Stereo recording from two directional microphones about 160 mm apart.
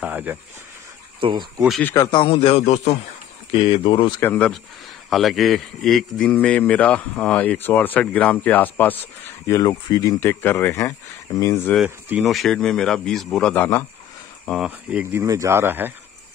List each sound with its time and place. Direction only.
0.0 s a sound: 10° right (ahead or behind)
1.2 s speech: 30° right (ahead or behind)
2.0 s a man's voice: 30° left (ahead or behind)
3.5 s a man's voice: 30° left (ahead or behind)
4.2 s a man's voice: 10° left (ahead or behind)
9.5 s a man's voice: 25° left (ahead or behind)
12.1 s a man's voice: centre (ahead or behind)
14.6 s speech: 5° right (ahead or behind)
15.2 s speech: 20° right (ahead or behind)